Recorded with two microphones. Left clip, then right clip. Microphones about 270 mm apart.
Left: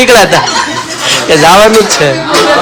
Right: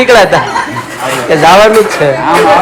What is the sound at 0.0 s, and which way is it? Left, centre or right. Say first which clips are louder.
A man's voice: left 1 dB; centre.